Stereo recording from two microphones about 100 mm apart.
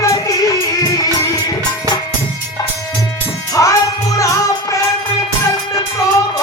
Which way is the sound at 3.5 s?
35° left (ahead or behind).